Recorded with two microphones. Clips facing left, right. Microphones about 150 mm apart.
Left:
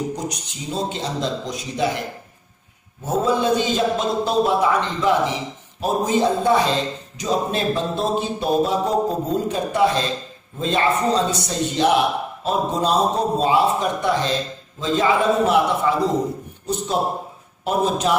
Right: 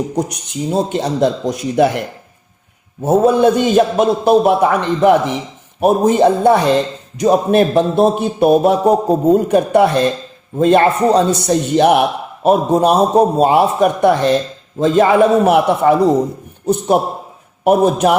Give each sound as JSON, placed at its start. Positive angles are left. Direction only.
{"t": 0.2, "sound": "a man's voice", "side_deg": -55}